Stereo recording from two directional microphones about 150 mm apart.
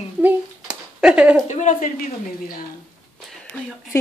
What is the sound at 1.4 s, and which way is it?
Speech, 55° left (ahead or behind).